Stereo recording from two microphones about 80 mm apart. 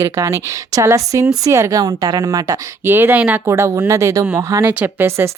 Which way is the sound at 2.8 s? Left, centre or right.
Right.